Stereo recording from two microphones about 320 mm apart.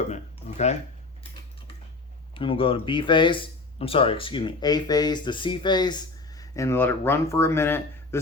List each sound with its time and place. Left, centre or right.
0.1 s speech: left
2.3 s speech: centre